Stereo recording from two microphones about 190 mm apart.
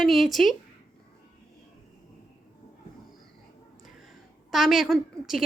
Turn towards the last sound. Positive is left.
turn(degrees=0)  # may be behind; listen again after turning